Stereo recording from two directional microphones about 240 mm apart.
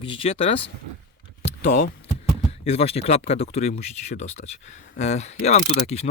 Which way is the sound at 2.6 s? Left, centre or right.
Left.